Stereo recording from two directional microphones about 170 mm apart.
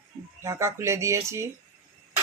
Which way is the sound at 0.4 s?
15° right (ahead or behind).